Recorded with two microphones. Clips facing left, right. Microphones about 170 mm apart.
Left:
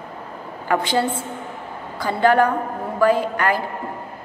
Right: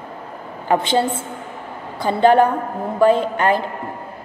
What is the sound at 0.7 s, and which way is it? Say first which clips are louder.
A woman's voice: right 3 dB; 25° right (ahead or behind).